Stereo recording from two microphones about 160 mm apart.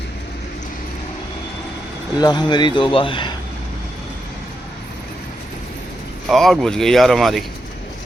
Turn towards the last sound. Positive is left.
turn(degrees=0)  # may be behind; listen again after turning